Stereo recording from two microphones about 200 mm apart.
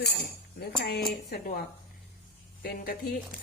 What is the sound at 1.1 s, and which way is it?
A woman's voice, 50° left (ahead or behind).